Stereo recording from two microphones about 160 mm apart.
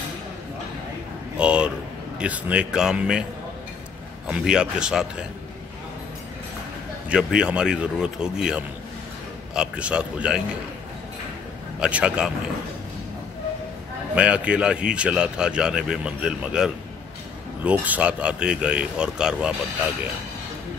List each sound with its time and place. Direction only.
1.3 s a sound: 5° right (ahead or behind)
2.1 s speech: 10° right (ahead or behind)
4.3 s speech: 5° right (ahead or behind)
7.1 s a man's voice: 5° right (ahead or behind)
11.8 s speech: 5° right (ahead or behind)
14.1 s speech: 5° right (ahead or behind)